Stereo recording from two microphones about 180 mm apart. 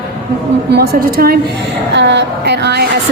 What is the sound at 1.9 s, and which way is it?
Speech, 75° right (ahead or behind).